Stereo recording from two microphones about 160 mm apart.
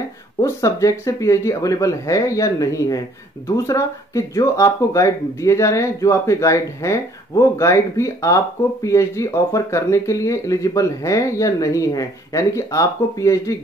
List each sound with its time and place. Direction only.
0.4 s speech: 20° left (ahead or behind)